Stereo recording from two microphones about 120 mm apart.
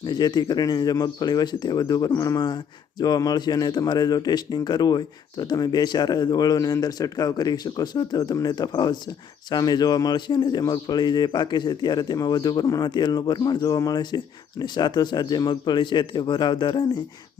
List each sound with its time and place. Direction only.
0.1 s a man's voice: 35° left (ahead or behind)